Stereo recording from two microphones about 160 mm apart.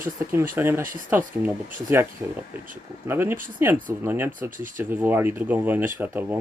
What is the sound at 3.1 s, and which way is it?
Speech, 15° right (ahead or behind).